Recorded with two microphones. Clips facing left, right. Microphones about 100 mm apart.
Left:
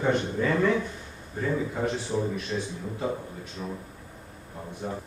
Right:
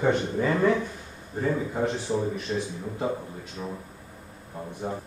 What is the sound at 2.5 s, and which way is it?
Speech, 20° right (ahead or behind).